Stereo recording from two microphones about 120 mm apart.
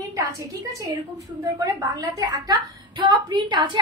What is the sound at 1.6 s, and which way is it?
Speech, 25° right (ahead or behind).